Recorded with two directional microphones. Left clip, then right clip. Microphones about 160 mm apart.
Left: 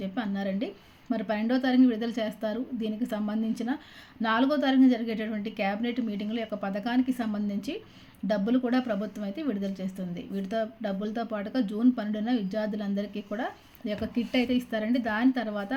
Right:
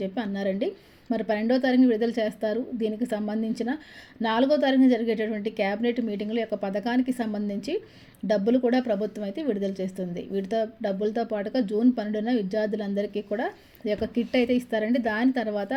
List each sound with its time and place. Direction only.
0.0 s a woman's voice: 20° right (ahead or behind)